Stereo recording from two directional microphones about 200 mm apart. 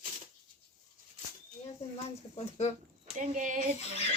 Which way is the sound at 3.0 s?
35° right (ahead or behind).